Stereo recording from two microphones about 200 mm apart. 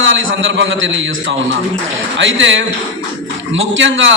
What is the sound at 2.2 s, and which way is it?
A man's voice, 70° right (ahead or behind).